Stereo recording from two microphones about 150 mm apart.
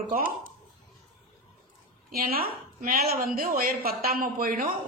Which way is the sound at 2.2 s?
85° right.